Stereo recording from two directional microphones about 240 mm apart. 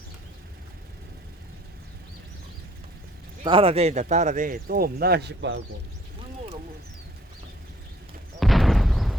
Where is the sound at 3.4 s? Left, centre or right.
Right.